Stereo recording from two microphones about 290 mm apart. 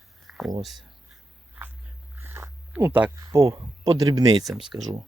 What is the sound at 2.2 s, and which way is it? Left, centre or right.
Speech, centre.